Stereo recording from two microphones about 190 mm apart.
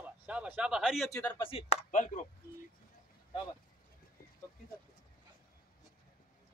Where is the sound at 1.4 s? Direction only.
30° left (ahead or behind).